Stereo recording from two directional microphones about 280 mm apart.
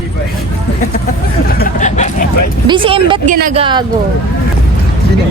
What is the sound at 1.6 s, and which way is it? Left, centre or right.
Speech, left.